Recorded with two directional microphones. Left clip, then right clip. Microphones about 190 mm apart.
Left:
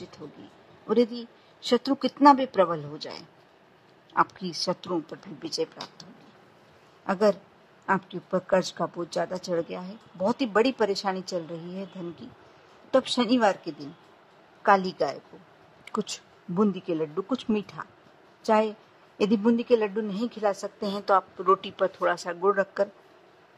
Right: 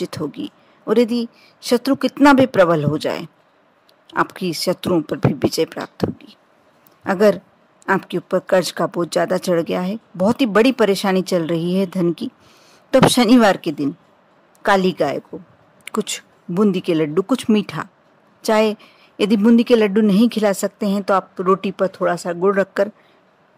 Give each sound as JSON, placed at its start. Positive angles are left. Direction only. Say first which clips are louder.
{"t": 0.4, "sound": "speech", "louder": "right 17 dB", "side_deg": -40}
{"t": 7.1, "sound": "speech", "louder": "right 9 dB", "side_deg": -40}